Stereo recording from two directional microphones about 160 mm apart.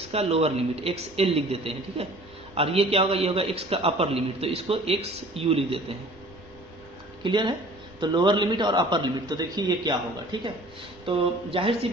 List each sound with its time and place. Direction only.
0.1 s a man's voice: 40° right (ahead or behind)
7.2 s a man's voice: 30° right (ahead or behind)